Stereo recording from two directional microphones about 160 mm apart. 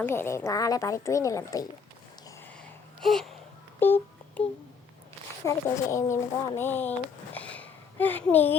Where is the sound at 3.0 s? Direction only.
Centre (ahead or behind).